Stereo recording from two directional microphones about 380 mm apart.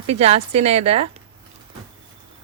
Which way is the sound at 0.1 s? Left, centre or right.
Centre.